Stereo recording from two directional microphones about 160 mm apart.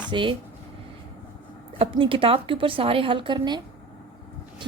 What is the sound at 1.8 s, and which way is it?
Speech, 35° right (ahead or behind).